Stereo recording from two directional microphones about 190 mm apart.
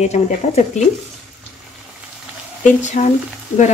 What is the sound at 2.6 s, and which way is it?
Speech, 40° left (ahead or behind).